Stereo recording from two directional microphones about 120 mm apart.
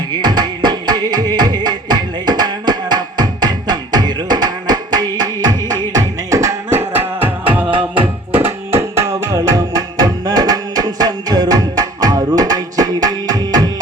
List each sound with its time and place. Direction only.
0.2 s music: 35° right (ahead or behind); by 7.6 s 15° right (ahead or behind)
7.6 s music: 40° right (ahead or behind)
8.3 s music: 20° right (ahead or behind)